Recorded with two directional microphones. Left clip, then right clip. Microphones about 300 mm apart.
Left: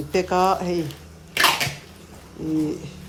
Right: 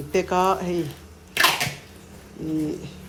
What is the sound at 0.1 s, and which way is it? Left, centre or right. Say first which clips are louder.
Speech: left 1 dB; centre.